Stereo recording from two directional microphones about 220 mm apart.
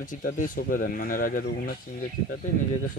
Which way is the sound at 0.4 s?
40° left (ahead or behind).